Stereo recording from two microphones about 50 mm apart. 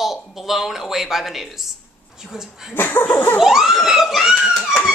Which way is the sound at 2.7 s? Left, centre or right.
Left.